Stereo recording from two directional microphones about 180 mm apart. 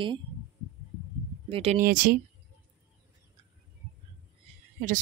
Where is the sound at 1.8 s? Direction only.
50° right (ahead or behind).